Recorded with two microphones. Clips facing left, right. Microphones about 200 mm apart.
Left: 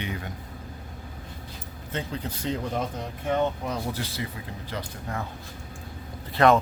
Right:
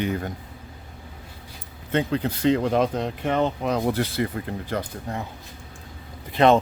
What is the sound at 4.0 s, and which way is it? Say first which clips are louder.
Speech: right 8 dB; 55° right (ahead or behind).